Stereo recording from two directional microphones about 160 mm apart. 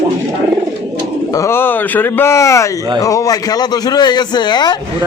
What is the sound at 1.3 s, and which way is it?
A man's voice, 15° left (ahead or behind).